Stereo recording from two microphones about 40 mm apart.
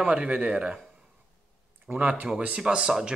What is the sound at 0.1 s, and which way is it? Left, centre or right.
Speech, right.